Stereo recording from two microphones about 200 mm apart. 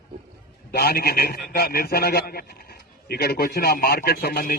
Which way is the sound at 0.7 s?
50° left (ahead or behind).